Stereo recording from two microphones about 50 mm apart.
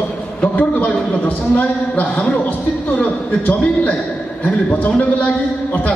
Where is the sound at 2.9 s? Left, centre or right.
Left.